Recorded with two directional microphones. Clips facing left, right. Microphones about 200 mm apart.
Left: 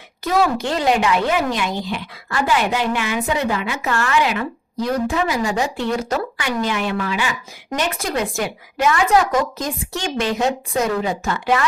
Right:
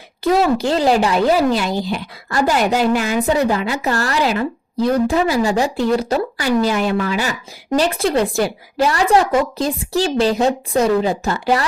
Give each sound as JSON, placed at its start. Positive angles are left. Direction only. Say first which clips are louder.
{"t": 0.3, "sound": "speech", "louder": "right 1 dB", "side_deg": -30}